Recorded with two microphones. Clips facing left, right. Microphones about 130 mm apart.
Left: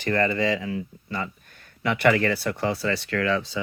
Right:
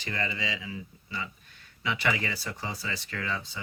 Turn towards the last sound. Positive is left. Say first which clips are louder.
# left 10 dB
turn(degrees=90)